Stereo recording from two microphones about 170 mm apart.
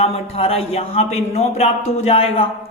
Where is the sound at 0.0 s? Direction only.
35° left (ahead or behind).